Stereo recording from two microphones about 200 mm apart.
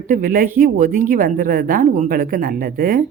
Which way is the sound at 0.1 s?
45° right (ahead or behind).